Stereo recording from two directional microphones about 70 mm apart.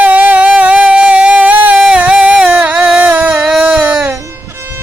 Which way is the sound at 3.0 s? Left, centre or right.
Right.